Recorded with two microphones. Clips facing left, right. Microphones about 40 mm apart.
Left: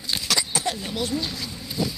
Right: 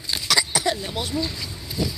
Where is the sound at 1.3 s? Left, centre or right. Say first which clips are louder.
Even; centre.